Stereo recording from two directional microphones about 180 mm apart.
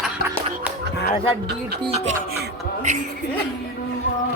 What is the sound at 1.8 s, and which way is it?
Speech, 35° right (ahead or behind).